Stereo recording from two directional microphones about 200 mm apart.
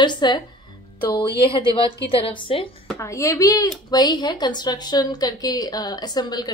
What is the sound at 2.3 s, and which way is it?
Speech, 25° left (ahead or behind).